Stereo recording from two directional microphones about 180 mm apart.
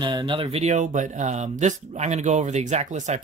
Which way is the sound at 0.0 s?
25° right (ahead or behind).